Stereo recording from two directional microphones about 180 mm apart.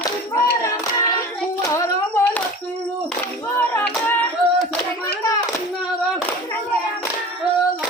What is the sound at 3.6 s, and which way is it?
Music, 10° left (ahead or behind).